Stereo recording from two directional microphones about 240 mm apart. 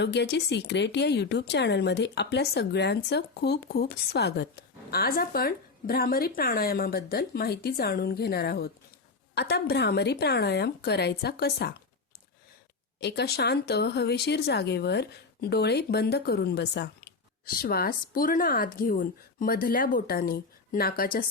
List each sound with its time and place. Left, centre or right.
0.0 s speech: left
13.0 s speech: left